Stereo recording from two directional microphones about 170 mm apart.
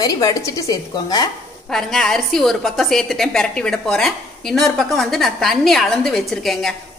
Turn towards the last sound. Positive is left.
turn(degrees=0)  # may be behind; listen again after turning